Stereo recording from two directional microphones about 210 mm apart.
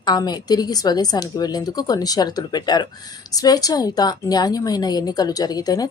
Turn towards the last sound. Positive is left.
turn(degrees=20)  # may be behind; listen again after turning